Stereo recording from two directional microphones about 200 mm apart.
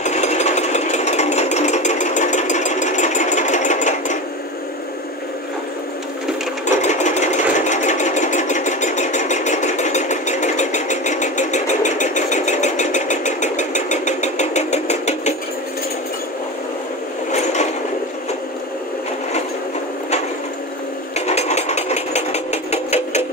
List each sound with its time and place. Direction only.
0.0 s jackhammer: 35° left (ahead or behind)
6.6 s sewing machine: 35° left (ahead or behind)
17.3 s train: 35° left (ahead or behind)
21.3 s a sound: 35° left (ahead or behind)